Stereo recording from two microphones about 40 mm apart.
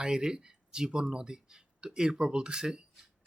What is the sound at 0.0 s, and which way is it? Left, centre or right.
Speech, centre.